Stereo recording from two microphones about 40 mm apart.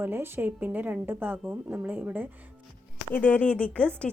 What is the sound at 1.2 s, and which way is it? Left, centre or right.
Speech, right.